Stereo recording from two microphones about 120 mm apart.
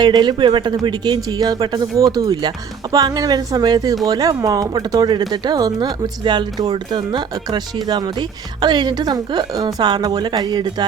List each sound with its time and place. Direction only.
0.0 s speech: 35° right (ahead or behind)